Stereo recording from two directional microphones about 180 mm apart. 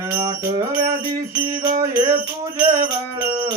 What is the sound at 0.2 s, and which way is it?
Music, 20° right (ahead or behind).